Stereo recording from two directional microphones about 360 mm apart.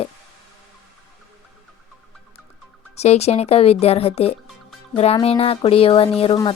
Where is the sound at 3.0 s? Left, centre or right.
Centre.